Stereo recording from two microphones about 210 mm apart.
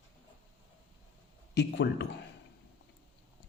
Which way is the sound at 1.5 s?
55° left (ahead or behind).